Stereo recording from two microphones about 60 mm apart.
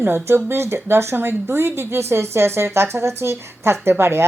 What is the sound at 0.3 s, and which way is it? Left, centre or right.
A woman's voice, right.